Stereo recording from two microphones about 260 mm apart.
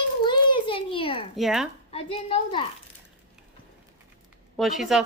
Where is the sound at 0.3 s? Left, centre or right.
Centre.